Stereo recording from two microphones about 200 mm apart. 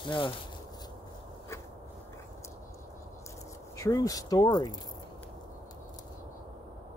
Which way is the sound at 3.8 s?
15° left (ahead or behind).